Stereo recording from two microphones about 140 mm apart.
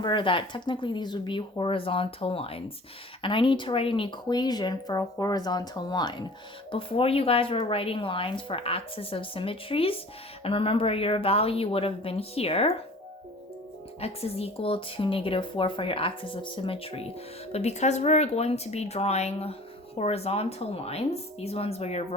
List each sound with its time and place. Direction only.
0.0 s a woman's voice: 35° left (ahead or behind)
14.0 s a woman's voice: 45° left (ahead or behind)